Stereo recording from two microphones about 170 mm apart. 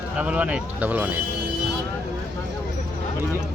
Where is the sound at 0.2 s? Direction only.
10° right (ahead or behind).